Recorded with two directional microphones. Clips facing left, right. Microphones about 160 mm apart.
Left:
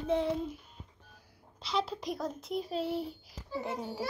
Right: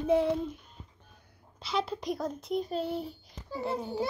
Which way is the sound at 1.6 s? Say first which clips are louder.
Right 2 dB; centre (ahead or behind).